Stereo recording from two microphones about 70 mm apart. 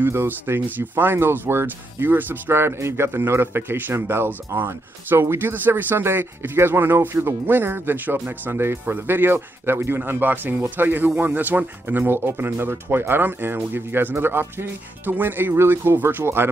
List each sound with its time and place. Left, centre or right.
0.1 s speech: right